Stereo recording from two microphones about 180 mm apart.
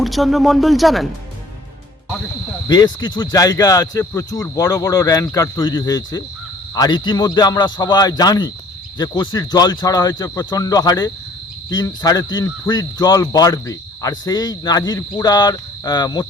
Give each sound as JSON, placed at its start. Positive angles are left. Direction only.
{"t": 0.0, "sound": "speech", "side_deg": 0}
{"t": 2.6, "sound": "speech", "side_deg": 25}